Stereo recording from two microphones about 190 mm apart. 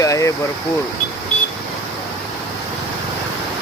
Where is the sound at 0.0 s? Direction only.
15° left (ahead or behind).